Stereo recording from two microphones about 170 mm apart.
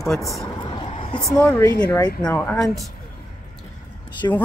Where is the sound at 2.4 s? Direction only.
5° left (ahead or behind).